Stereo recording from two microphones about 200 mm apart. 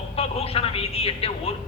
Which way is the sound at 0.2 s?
30° left (ahead or behind).